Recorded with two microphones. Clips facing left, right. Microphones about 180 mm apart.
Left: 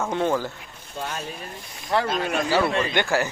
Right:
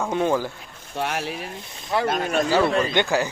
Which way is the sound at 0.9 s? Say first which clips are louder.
Right 5 dB; 75° right (ahead or behind).